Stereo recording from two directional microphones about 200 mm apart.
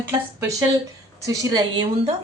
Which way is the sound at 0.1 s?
10° right (ahead or behind).